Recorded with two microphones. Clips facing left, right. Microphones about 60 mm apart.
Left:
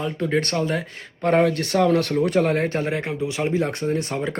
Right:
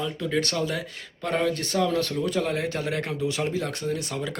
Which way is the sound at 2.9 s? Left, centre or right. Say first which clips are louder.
Left 2 dB; left.